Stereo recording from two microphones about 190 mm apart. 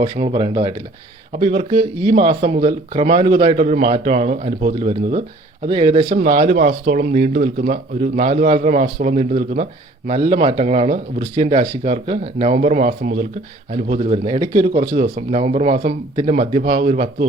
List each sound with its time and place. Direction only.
0.0 s speech: 30° right (ahead or behind)
1.4 s speech: 35° right (ahead or behind)
10.2 s speech: 30° right (ahead or behind)